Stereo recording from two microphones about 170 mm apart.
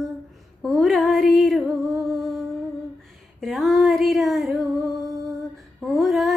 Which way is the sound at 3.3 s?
Centre (ahead or behind).